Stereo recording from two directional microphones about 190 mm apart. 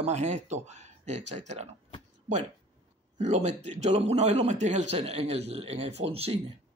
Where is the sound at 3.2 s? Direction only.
35° right (ahead or behind).